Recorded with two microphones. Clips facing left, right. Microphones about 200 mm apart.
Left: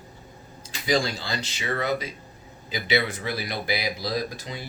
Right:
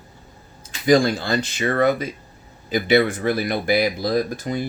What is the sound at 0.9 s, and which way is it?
Speech, 55° right (ahead or behind).